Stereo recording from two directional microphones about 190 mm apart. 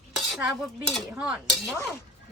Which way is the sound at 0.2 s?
Centre (ahead or behind).